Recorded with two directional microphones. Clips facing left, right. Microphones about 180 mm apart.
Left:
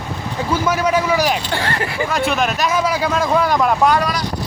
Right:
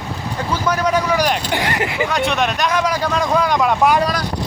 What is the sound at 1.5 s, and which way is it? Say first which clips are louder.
Speech: right 1 dB; 15° right (ahead or behind).